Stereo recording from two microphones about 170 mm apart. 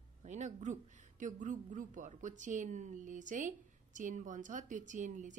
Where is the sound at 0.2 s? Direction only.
45° right (ahead or behind).